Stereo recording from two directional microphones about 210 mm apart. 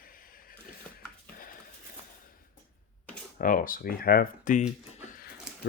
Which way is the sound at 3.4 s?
40° left (ahead or behind).